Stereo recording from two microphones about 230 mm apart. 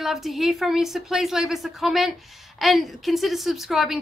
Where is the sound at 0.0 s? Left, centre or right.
Centre.